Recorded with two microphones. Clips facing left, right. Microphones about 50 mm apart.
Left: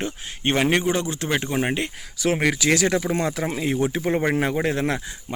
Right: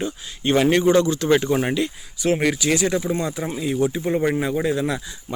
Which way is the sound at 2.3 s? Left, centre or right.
Left.